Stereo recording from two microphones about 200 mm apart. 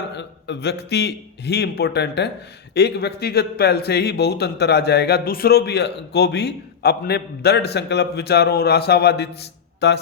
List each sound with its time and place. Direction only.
0.1 s speech: 60° left (ahead or behind)